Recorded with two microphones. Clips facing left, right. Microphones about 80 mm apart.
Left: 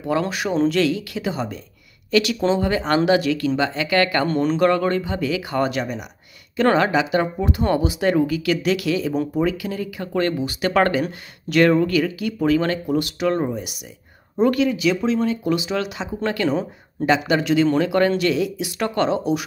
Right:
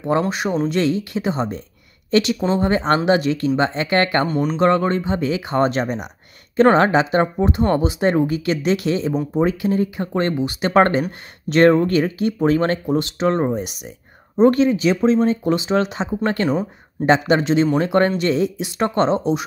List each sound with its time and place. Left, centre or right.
0.2 s speech: right
4.3 s speech: centre
4.6 s speech: right
16.4 s speech: right